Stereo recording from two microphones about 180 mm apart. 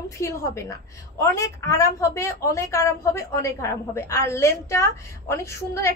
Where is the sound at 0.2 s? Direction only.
15° left (ahead or behind).